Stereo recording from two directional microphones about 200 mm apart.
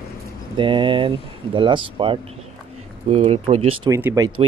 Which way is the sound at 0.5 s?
25° right (ahead or behind).